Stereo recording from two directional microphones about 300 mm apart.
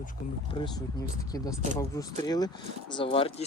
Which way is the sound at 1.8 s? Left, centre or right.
Centre.